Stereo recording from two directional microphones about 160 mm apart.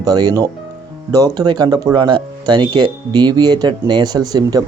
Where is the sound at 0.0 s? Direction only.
25° right (ahead or behind).